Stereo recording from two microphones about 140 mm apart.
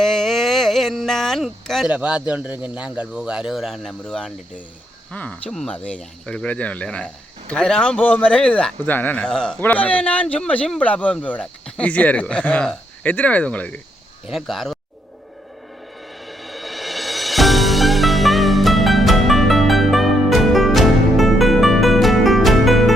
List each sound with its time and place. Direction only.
0.0 s speech: centre (ahead or behind)
14.3 s speech: centre (ahead or behind)
16.2 s music: centre (ahead or behind)